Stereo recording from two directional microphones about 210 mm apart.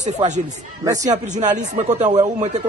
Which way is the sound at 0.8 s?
15° right (ahead or behind).